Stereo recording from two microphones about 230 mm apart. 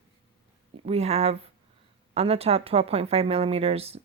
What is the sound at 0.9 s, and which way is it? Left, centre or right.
Speech, right.